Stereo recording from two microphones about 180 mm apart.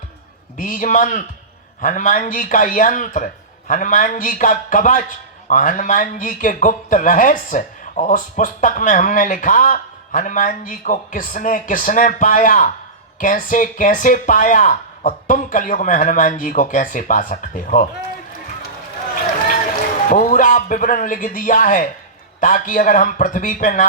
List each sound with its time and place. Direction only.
0.5 s a man's voice: 45° left (ahead or behind)
20.2 s a man's voice: 45° left (ahead or behind)